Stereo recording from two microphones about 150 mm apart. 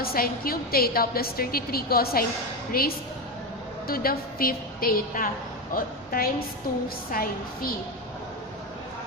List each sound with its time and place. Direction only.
0.0 s a woman's voice: 85° left